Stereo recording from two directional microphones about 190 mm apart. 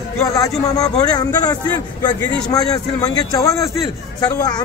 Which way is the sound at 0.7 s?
20° left (ahead or behind).